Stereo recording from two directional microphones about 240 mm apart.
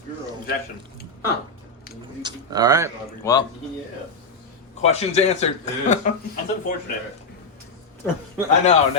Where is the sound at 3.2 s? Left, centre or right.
Centre.